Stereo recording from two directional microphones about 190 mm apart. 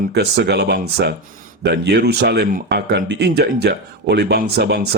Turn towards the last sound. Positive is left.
turn(degrees=-60)  # may be behind; listen again after turning